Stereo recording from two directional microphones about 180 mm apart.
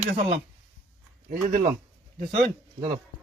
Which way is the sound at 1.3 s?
50° right (ahead or behind).